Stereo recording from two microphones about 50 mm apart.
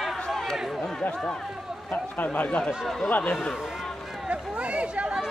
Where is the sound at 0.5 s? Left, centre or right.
Centre.